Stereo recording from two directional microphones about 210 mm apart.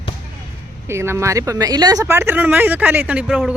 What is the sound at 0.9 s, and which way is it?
Speech, 10° right (ahead or behind).